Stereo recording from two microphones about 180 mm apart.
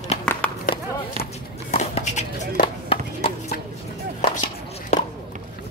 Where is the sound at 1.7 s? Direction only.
40° left (ahead or behind).